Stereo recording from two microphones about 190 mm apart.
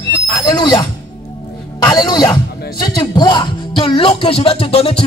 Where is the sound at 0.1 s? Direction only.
25° left (ahead or behind).